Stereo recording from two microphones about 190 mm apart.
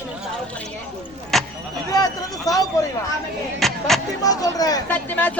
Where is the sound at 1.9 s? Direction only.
20° left (ahead or behind).